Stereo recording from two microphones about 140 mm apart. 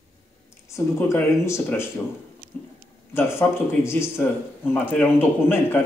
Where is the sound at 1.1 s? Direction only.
15° left (ahead or behind).